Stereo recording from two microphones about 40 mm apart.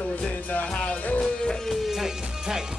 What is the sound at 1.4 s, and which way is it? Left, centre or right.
Music, centre.